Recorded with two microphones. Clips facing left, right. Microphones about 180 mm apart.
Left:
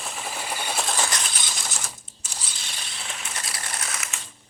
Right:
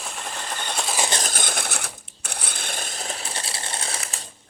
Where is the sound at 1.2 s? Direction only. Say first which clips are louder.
Right 6 dB; 50° right (ahead or behind); by 4.3 s 35° right (ahead or behind).